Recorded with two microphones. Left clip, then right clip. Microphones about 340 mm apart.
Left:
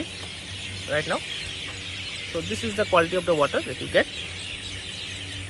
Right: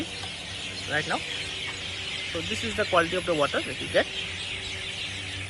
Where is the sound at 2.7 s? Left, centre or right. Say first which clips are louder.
Left 3 dB; centre.